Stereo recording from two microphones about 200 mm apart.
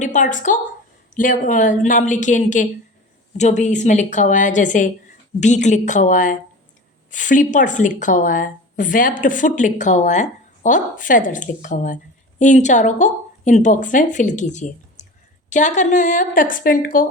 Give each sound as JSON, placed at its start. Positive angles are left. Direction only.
{"t": 0.0, "sound": "a woman's voice", "side_deg": 40}